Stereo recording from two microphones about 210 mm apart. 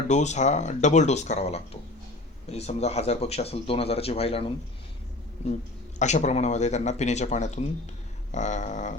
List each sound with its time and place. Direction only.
0.1 s speech: 35° left (ahead or behind)
6.0 s speech: 35° left (ahead or behind)